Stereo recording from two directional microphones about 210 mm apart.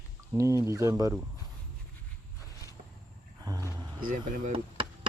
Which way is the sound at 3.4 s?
15° right (ahead or behind).